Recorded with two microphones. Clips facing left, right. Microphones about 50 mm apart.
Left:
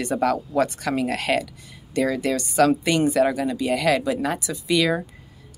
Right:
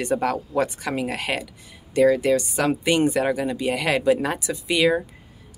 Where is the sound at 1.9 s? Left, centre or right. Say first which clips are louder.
Right 5 dB; right.